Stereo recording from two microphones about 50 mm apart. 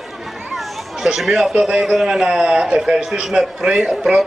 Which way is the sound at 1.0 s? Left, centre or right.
Centre.